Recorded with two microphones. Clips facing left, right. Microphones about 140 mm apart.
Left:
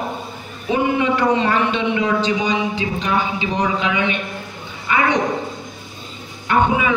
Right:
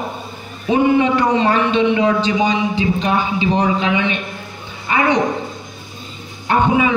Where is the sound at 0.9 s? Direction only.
30° right (ahead or behind).